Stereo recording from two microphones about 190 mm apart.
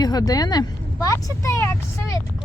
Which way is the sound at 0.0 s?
20° left (ahead or behind).